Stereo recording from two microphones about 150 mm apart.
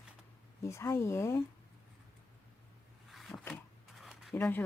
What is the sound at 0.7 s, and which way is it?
Speech, 20° left (ahead or behind).